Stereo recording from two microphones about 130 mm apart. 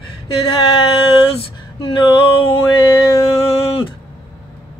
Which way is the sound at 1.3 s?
40° left (ahead or behind).